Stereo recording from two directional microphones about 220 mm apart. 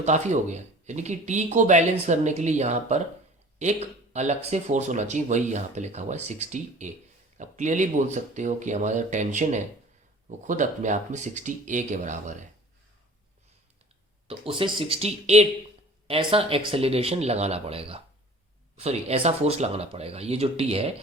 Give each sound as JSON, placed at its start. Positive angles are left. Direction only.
{"t": 0.0, "sound": "speech", "side_deg": -30}
{"t": 14.3, "sound": "speech", "side_deg": -25}